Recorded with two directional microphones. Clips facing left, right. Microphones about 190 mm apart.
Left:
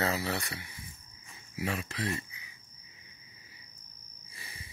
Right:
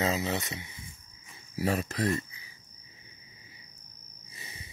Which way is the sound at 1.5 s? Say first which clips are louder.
Right 6 dB; 40° right (ahead or behind).